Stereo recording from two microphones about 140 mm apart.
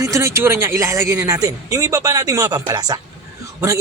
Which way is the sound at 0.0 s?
20° right (ahead or behind).